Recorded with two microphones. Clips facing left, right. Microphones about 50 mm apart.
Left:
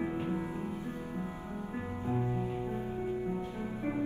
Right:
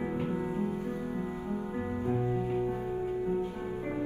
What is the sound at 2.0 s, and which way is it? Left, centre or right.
Music, right.